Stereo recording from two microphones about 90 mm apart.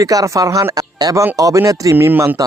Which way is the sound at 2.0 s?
25° right (ahead or behind).